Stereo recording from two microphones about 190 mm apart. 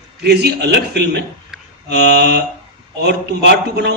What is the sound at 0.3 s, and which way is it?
A man's voice, 60° right (ahead or behind).